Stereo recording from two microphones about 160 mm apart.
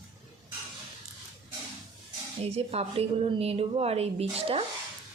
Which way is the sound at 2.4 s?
40° right (ahead or behind).